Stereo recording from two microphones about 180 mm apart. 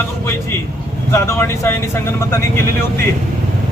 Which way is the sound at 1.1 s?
15° left (ahead or behind).